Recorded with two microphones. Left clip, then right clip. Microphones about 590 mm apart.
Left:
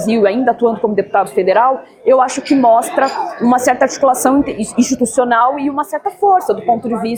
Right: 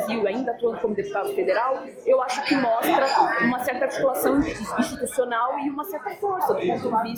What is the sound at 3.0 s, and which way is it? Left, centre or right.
Speech, left.